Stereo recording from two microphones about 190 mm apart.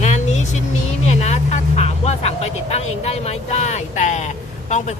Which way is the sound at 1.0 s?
35° left (ahead or behind).